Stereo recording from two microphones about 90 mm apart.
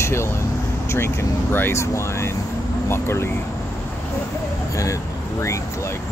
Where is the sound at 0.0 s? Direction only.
30° left (ahead or behind).